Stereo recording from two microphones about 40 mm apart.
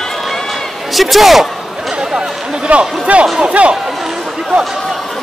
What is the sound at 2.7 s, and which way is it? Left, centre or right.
Speech, right.